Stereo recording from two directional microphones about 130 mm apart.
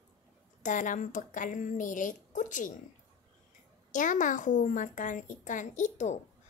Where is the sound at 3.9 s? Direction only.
80° left; by 6.2 s 65° left (ahead or behind).